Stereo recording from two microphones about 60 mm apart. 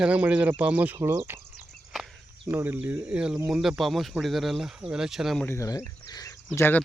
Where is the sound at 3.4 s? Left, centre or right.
Centre.